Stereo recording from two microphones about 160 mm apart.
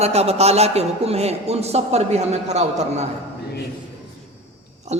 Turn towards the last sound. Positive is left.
turn(degrees=-45)  # may be behind; listen again after turning